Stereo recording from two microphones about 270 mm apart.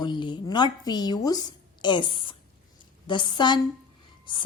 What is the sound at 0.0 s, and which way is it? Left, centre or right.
A woman's voice, centre.